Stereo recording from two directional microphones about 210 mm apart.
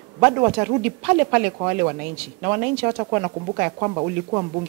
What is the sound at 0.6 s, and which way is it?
Speech, 15° right (ahead or behind).